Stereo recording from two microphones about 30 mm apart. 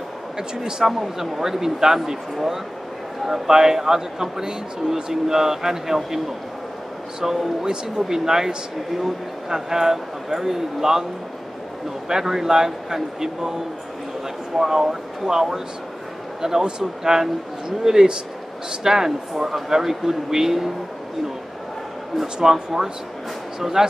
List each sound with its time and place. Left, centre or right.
0.4 s a man's voice: right
3.3 s speech: centre
12.1 s speech: centre
14.7 s a man's voice: centre
22.1 s speech: centre